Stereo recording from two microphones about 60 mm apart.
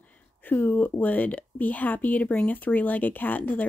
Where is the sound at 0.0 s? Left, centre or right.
Left.